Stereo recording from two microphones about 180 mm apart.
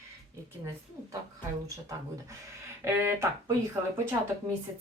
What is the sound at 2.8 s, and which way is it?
Speech, 15° right (ahead or behind).